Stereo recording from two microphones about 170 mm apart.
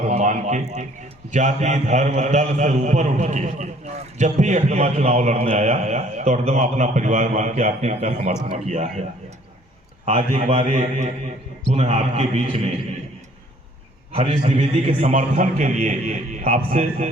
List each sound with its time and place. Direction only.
0.0 s a sound: 45° right (ahead or behind)
1.3 s a man's voice: 45° right (ahead or behind)
10.1 s a man's voice: 50° right (ahead or behind)
14.2 s a man's voice: 45° right (ahead or behind)